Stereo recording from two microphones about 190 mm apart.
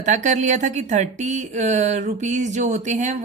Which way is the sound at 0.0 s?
40° right (ahead or behind).